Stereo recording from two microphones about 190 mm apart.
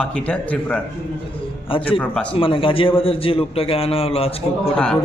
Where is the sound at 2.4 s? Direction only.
25° left (ahead or behind).